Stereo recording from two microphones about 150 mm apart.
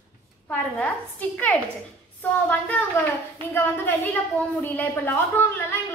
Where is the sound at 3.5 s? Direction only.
15° left (ahead or behind).